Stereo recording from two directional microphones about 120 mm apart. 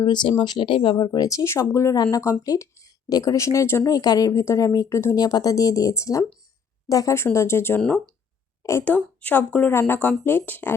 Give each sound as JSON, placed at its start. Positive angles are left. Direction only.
{"t": 0.0, "sound": "speech", "side_deg": 40}
{"t": 7.8, "sound": "speech", "side_deg": 5}
{"t": 8.6, "sound": "speech", "side_deg": 20}